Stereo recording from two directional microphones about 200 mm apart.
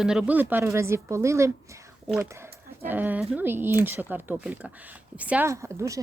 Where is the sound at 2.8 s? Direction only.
10° right (ahead or behind).